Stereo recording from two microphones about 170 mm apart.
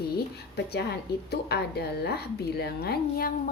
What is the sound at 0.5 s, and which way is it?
A woman's voice, 70° left (ahead or behind).